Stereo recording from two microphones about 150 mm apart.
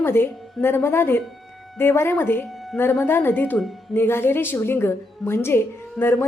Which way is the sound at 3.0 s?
15° left (ahead or behind).